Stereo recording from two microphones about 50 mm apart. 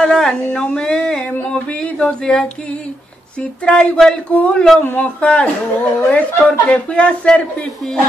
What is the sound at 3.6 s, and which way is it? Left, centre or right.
Speech, left.